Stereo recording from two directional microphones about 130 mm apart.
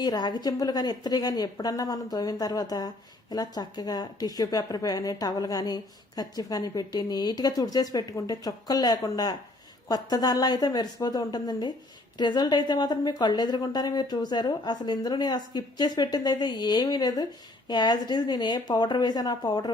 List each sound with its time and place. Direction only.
0.0 s a woman's voice: 35° left (ahead or behind)